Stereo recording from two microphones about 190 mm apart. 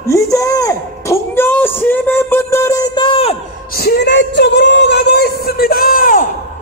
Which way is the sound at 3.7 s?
55° left (ahead or behind).